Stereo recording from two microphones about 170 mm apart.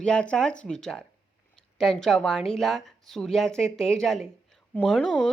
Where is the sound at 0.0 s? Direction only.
5° left (ahead or behind).